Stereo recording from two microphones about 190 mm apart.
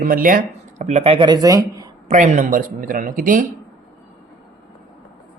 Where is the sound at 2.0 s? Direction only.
40° right (ahead or behind).